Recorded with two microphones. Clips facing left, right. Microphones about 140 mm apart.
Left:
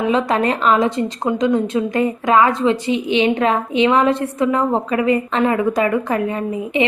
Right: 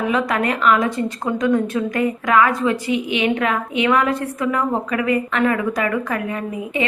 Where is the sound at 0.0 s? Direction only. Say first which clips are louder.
Left 3 dB; 25° left (ahead or behind).